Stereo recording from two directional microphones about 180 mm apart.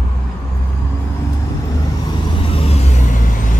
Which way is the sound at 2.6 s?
35° left (ahead or behind).